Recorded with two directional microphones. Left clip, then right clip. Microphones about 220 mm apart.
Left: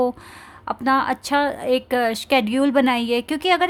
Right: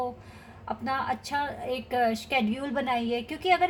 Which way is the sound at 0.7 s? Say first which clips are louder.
Left 10 dB; 50° left (ahead or behind).